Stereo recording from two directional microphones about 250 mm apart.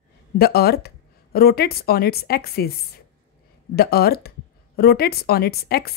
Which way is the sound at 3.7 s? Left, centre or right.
Left.